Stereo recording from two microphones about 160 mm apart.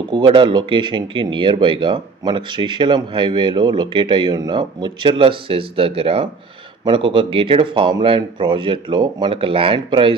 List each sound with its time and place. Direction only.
0.1 s speech: 30° right (ahead or behind)